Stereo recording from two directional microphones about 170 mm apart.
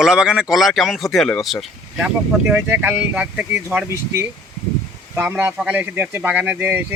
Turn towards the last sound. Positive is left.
turn(degrees=-10)  # may be behind; listen again after turning